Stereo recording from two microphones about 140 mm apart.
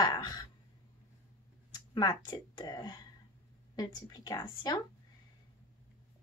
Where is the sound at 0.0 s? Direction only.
30° left (ahead or behind).